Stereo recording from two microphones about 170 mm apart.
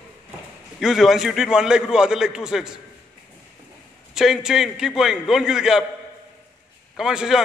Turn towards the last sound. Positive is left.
turn(degrees=-5)  # may be behind; listen again after turning